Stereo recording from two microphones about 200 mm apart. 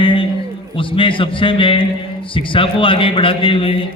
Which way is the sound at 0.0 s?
25° left (ahead or behind).